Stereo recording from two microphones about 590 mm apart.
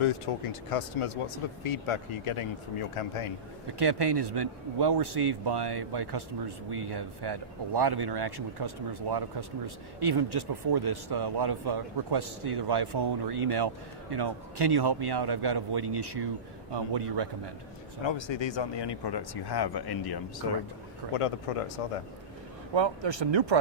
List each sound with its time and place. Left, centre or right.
0.3 s speech: left
3.8 s speech: right
18.0 s speech: left
21.1 s speech: left
22.7 s speech: right